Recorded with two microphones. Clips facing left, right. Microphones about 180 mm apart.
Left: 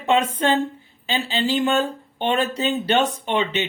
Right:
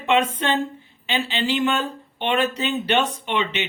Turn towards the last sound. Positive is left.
turn(degrees=40)  # may be behind; listen again after turning